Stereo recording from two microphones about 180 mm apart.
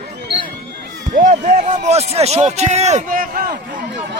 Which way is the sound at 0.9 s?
45° right (ahead or behind).